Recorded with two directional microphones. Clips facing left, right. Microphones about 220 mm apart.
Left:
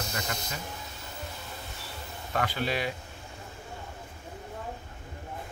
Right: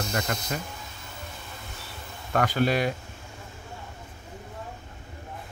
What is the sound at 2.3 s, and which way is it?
Speech, 45° right (ahead or behind).